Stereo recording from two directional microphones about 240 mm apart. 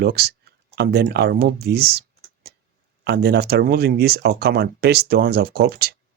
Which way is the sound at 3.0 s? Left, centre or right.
Right.